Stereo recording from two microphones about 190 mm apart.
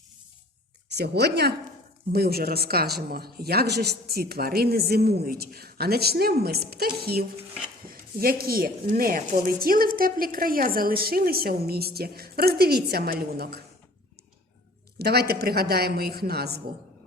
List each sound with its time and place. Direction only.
0.9 s a woman's voice: 60° right (ahead or behind)
14.9 s speech: 55° right (ahead or behind)